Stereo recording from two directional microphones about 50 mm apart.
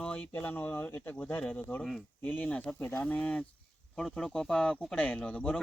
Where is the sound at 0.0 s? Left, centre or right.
Left.